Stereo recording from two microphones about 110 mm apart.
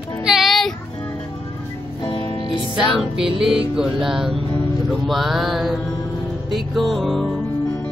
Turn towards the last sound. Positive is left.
turn(degrees=5)  # may be behind; listen again after turning